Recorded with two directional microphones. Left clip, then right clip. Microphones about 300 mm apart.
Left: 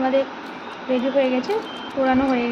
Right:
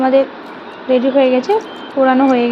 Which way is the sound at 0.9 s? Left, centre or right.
Centre.